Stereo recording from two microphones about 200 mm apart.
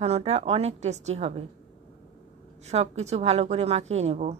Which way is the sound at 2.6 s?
35° right (ahead or behind).